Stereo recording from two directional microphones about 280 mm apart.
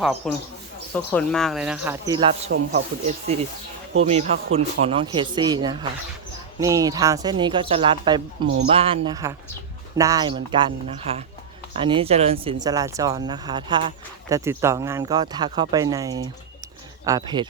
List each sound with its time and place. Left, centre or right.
0.2 s speech: centre